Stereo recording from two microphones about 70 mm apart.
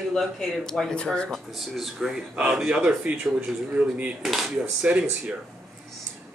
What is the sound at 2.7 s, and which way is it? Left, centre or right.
Speech, centre.